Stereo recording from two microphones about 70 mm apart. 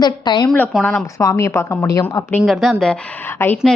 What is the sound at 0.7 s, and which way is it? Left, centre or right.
Speech, centre.